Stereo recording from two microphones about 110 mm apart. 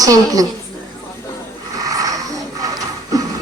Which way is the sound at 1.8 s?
35° right (ahead or behind).